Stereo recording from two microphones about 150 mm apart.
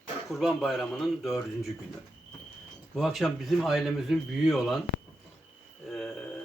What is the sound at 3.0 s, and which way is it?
A man's voice, centre (ahead or behind).